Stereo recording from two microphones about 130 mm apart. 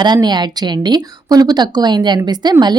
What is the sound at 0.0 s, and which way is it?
Speech, 35° right (ahead or behind).